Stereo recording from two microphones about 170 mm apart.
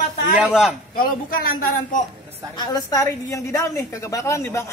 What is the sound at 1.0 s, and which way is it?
A man's voice, 60° left (ahead or behind).